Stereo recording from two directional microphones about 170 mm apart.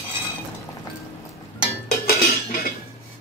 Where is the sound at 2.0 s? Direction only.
60° left (ahead or behind).